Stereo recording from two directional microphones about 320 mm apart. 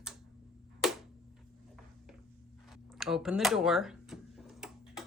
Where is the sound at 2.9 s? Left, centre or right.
Centre.